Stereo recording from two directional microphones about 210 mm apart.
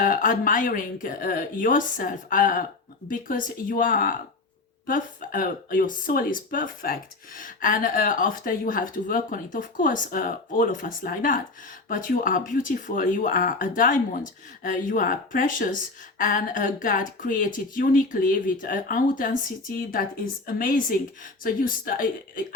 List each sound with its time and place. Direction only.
0.0 s a woman's voice: 40° left (ahead or behind)